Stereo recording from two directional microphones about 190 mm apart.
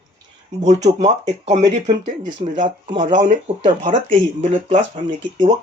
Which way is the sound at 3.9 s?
40° right (ahead or behind).